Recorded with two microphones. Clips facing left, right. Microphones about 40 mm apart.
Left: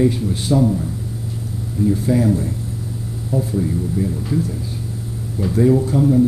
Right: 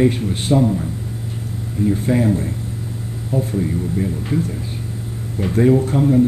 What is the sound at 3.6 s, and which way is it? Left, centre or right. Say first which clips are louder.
Speech: even; right.